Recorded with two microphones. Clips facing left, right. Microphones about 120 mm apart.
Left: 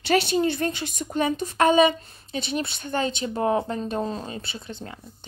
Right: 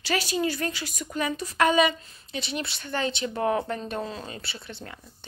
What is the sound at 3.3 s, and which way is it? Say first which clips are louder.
Speech: left 2 dB; 25° left (ahead or behind).